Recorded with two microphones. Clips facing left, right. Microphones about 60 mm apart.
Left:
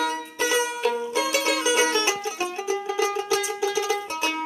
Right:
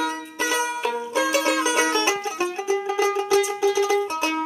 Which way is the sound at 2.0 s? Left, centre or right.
Right.